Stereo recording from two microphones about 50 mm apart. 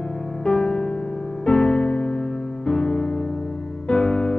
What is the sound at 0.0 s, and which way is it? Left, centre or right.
Music, centre.